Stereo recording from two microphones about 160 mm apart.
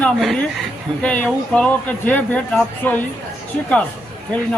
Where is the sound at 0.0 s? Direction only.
5° left (ahead or behind).